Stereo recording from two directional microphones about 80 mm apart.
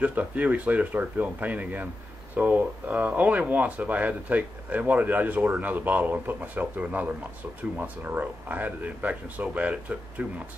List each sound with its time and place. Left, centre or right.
0.0 s speech: centre